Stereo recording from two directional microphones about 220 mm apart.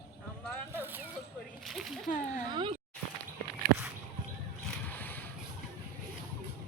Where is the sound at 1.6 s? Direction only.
Centre (ahead or behind).